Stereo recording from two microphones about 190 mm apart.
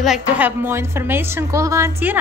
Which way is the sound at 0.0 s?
5° right (ahead or behind).